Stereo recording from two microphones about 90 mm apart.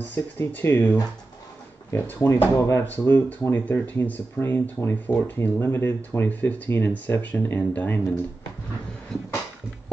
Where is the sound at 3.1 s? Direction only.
35° left (ahead or behind).